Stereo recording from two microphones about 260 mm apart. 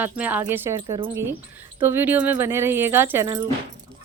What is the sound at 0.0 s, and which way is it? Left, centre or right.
A woman's voice, centre.